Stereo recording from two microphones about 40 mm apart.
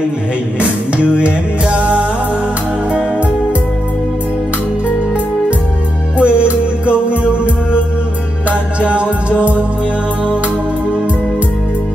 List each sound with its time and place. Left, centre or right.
0.6 s music: right
6.1 s music: right